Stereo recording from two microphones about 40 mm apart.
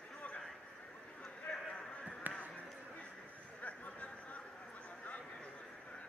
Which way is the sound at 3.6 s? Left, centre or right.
Left.